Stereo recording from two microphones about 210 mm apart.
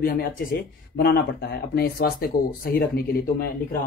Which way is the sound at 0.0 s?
45° left (ahead or behind).